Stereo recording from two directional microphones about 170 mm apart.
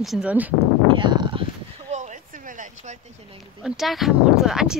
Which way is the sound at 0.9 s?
25° right (ahead or behind).